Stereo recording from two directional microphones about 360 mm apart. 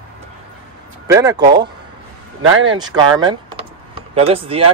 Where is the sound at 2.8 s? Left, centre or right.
Centre.